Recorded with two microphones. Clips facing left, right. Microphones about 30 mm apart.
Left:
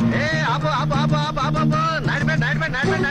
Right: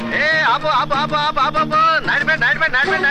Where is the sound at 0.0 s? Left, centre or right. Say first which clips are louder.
Right 4 dB; right.